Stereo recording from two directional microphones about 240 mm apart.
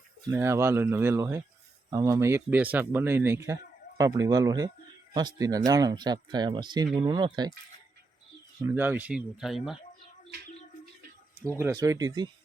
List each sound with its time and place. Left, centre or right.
0.3 s speech: centre
8.6 s speech: centre
11.4 s speech: centre